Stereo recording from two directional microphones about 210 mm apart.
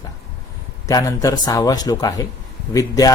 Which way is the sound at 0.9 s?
15° left (ahead or behind).